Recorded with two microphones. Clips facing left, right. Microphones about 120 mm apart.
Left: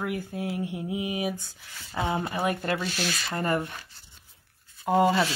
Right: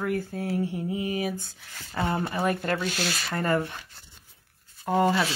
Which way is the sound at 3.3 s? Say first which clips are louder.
Right 2 dB; 25° left (ahead or behind).